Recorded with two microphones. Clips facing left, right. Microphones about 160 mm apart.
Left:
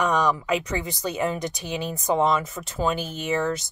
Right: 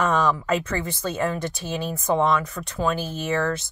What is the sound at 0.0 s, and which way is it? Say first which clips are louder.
Speech: right 1 dB; 15° left (ahead or behind).